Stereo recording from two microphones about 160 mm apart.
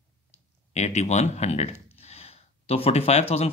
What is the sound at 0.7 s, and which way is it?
Speech, 45° left (ahead or behind).